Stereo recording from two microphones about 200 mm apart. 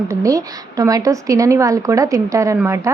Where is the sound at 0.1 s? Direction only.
15° right (ahead or behind).